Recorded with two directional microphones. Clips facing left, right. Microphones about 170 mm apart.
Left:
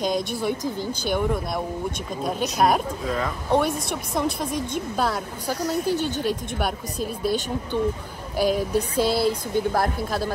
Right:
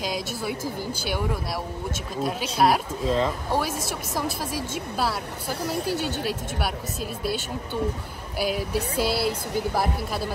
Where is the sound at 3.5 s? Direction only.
5° right (ahead or behind).